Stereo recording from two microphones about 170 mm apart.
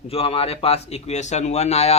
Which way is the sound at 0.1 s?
35° left (ahead or behind).